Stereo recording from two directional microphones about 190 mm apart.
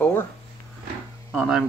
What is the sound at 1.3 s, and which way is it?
Speech, centre (ahead or behind).